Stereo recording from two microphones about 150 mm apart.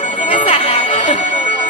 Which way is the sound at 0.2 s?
55° left (ahead or behind).